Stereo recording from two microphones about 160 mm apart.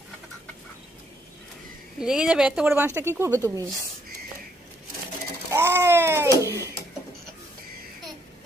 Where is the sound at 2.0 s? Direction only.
5° right (ahead or behind); by 3.7 s 20° right (ahead or behind).